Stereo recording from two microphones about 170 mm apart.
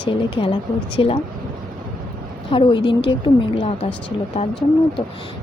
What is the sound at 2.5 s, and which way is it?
A woman's voice, 30° left (ahead or behind).